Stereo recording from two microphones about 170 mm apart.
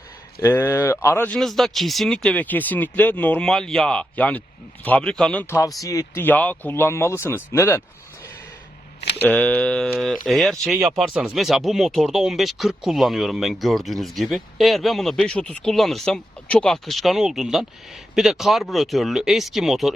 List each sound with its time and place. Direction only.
0.4 s speech: 15° left (ahead or behind)
1.4 s speech: centre (ahead or behind)
9.0 s a sound: 80° left
9.2 s speech: 10° left (ahead or behind)